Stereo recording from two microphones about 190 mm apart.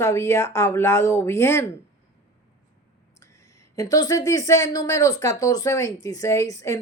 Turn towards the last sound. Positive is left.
turn(degrees=15)  # may be behind; listen again after turning